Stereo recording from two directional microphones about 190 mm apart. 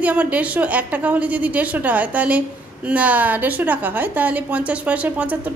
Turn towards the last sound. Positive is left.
turn(degrees=-10)  # may be behind; listen again after turning